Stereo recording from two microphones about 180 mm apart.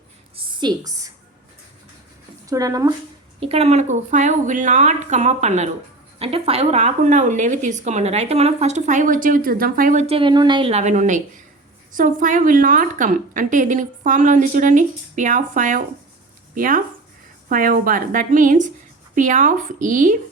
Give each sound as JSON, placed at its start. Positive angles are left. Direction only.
{"t": 0.3, "sound": "a sound", "side_deg": -25}
{"t": 2.5, "sound": "speech", "side_deg": -20}
{"t": 3.4, "sound": "a woman's voice", "side_deg": -35}